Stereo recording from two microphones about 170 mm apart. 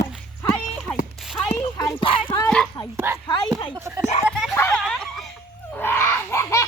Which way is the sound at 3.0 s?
15° right (ahead or behind).